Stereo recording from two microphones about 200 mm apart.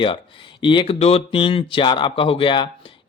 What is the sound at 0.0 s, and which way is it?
Speech, 25° left (ahead or behind).